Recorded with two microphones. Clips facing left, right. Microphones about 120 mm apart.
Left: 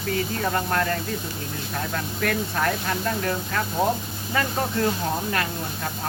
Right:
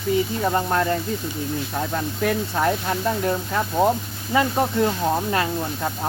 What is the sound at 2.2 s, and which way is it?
Speech, 20° right (ahead or behind).